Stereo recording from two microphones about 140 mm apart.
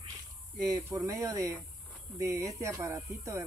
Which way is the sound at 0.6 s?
25° right (ahead or behind).